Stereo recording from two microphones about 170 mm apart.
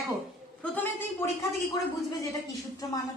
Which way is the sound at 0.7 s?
10° left (ahead or behind).